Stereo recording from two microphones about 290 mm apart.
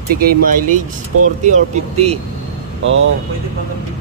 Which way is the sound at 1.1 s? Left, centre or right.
Right.